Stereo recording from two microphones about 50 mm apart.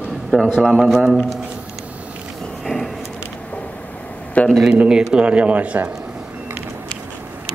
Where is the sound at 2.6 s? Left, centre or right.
Centre.